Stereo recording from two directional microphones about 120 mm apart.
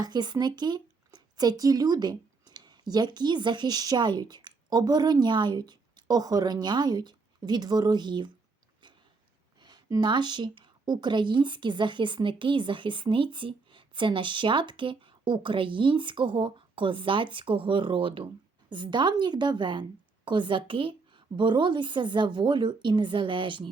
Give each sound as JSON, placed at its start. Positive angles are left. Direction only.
{"t": 0.0, "sound": "speech", "side_deg": -35}
{"t": 9.6, "sound": "a woman's voice", "side_deg": -35}